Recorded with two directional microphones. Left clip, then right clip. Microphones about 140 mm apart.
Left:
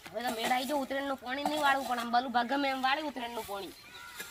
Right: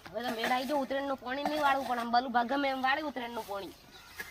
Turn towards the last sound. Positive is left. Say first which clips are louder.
# even
turn(degrees=0)  # may be behind; listen again after turning